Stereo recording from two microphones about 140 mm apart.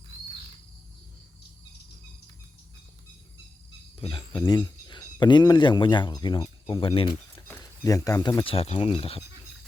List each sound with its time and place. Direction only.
4.0 s speech: 35° left (ahead or behind)
7.3 s a sound: 15° left (ahead or behind)
7.6 s speech: 25° left (ahead or behind)
8.4 s speech: 45° left (ahead or behind)